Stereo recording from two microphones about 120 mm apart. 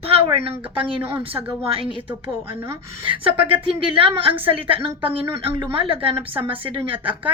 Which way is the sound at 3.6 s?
50° right (ahead or behind).